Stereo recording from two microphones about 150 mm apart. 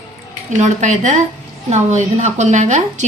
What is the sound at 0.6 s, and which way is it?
Speech, 50° right (ahead or behind).